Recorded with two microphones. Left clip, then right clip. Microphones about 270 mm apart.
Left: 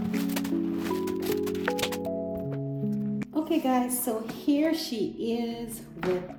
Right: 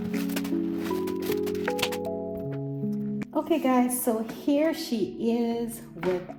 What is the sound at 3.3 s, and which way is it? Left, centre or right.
Speech, centre.